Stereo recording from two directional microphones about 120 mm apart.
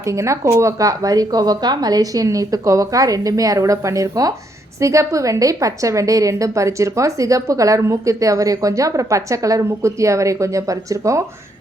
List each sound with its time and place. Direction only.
0.0 s a woman's voice: 25° right (ahead or behind)